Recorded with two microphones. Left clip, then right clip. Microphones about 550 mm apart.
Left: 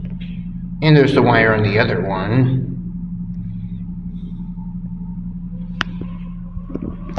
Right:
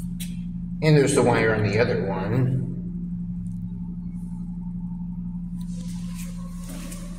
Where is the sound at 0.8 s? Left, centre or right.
Centre.